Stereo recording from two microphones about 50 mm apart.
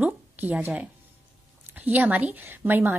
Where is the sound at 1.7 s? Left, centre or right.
Right.